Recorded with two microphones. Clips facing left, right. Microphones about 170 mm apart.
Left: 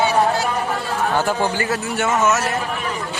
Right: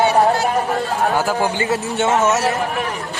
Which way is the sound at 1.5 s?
20° right (ahead or behind).